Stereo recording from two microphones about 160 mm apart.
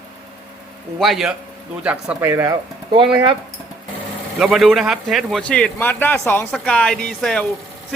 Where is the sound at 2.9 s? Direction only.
30° right (ahead or behind).